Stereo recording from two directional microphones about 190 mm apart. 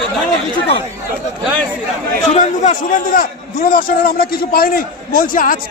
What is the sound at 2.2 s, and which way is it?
A man's voice, 40° left (ahead or behind).